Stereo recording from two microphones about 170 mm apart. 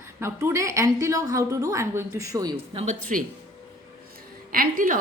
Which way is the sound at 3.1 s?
45° right (ahead or behind).